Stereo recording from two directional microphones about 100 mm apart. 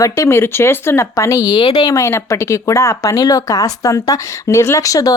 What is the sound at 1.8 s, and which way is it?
Speech, 30° left (ahead or behind).